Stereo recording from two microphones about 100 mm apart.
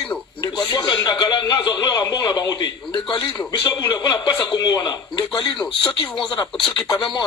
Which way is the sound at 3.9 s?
40° left (ahead or behind).